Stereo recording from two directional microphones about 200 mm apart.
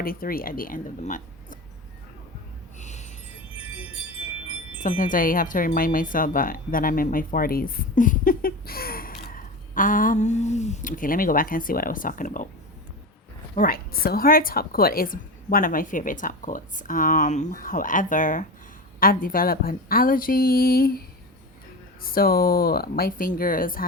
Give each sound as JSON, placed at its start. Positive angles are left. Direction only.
{"t": 0.0, "sound": "speech", "side_deg": 45}
{"t": 2.7, "sound": "a sound", "side_deg": 35}
{"t": 4.8, "sound": "speech", "side_deg": 40}
{"t": 13.6, "sound": "speech", "side_deg": 50}
{"t": 22.0, "sound": "speech", "side_deg": 45}